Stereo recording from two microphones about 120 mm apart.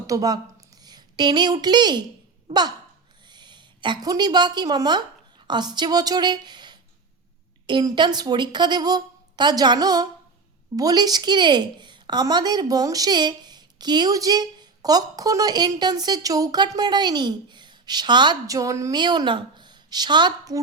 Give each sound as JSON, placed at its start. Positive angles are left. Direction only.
{"t": 0.1, "sound": "a woman's voice", "side_deg": -30}